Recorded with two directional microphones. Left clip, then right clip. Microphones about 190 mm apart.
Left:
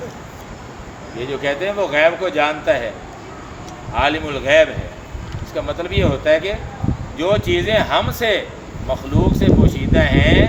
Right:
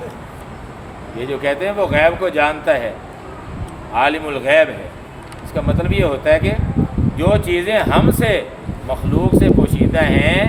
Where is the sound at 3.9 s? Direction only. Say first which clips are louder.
Right 2 dB; 25° right (ahead or behind).